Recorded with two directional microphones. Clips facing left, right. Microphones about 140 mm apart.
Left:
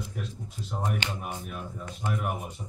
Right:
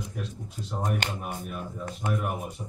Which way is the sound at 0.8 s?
45° right (ahead or behind).